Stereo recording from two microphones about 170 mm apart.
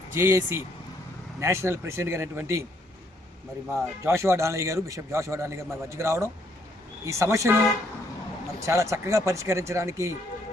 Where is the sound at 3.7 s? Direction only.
15° right (ahead or behind).